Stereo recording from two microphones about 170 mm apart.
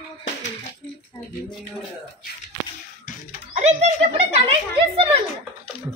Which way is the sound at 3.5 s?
40° right (ahead or behind).